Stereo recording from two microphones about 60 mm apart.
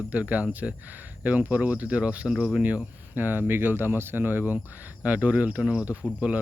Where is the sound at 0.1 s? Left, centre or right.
Right.